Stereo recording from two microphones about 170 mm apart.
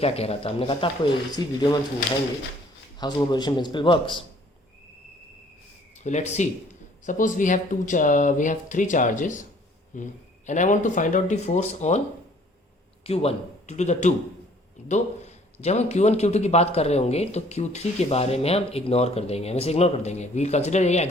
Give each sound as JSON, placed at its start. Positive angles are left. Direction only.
{"t": 0.0, "sound": "speech", "side_deg": 35}
{"t": 3.0, "sound": "speech", "side_deg": 25}
{"t": 6.0, "sound": "speech", "side_deg": 45}
{"t": 13.1, "sound": "a man's voice", "side_deg": 35}